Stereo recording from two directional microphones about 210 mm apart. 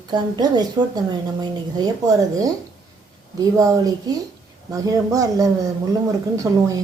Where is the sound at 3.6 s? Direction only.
15° right (ahead or behind).